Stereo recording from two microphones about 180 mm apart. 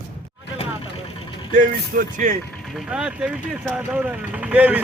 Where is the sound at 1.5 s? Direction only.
50° right (ahead or behind).